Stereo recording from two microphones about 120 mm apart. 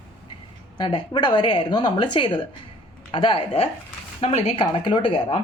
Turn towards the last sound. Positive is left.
turn(degrees=40)  # may be behind; listen again after turning